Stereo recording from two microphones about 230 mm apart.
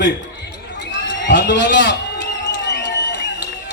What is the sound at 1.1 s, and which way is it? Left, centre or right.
Speech, left.